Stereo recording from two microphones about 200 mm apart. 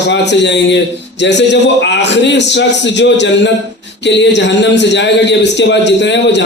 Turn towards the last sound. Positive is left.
turn(degrees=60)  # may be behind; listen again after turning